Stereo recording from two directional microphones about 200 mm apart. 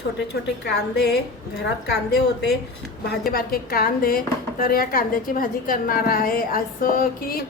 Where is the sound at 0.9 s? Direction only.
55° left (ahead or behind).